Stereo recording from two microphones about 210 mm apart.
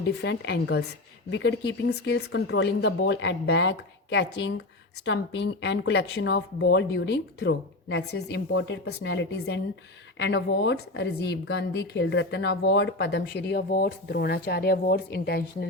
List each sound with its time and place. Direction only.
0.0 s a woman's voice: 55° left (ahead or behind)